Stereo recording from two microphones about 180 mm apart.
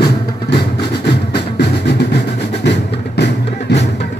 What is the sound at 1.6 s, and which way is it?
Music, 65° left (ahead or behind).